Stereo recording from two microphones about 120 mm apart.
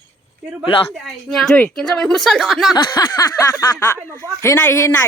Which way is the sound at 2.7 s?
35° left (ahead or behind).